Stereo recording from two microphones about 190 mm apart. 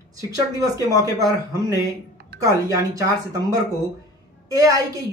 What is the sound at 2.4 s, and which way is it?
A woman's voice, 15° right (ahead or behind).